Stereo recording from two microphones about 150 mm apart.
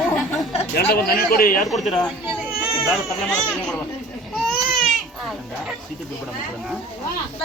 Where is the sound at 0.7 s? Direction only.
90° left; by 1.7 s 75° left (ahead or behind).